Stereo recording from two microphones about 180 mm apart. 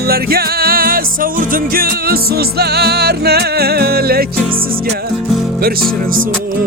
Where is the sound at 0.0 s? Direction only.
60° right (ahead or behind).